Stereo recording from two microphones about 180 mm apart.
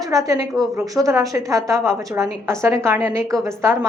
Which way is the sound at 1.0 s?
15° right (ahead or behind).